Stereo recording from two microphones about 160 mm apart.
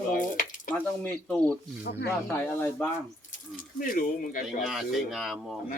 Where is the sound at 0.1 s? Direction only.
60° left (ahead or behind).